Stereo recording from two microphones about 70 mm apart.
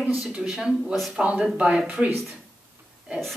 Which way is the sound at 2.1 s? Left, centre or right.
Centre.